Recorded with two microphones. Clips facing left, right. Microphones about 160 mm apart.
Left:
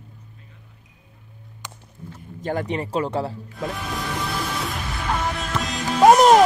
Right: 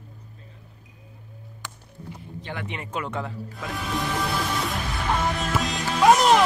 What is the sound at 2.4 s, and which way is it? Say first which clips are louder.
Speech: left 10 dB; 40° left (ahead or behind).